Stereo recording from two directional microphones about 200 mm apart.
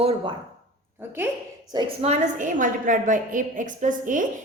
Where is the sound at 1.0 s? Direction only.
10° right (ahead or behind).